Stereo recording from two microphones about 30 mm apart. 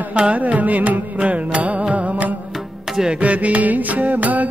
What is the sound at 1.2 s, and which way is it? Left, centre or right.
Music, right.